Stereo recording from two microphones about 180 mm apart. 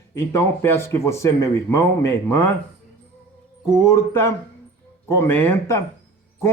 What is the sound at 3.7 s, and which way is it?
Speech, 15° left (ahead or behind).